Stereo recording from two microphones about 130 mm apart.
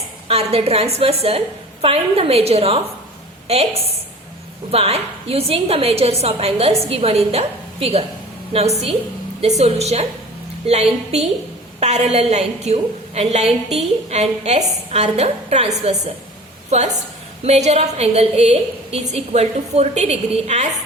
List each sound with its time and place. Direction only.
0.3 s a woman's voice: 50° right (ahead or behind)